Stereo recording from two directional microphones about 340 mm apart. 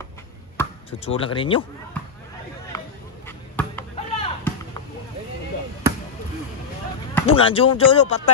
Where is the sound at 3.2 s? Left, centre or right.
Centre.